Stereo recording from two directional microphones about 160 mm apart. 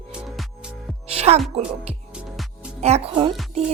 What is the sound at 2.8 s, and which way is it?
Speech, 40° right (ahead or behind).